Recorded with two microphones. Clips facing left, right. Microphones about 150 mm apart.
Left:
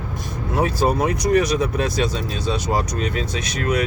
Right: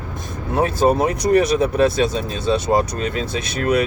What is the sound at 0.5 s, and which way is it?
Speech, 25° right (ahead or behind).